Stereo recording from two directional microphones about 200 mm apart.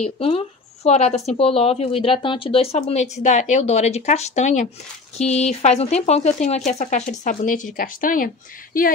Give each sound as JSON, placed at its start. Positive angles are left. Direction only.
{"t": 0.0, "sound": "speech", "side_deg": 30}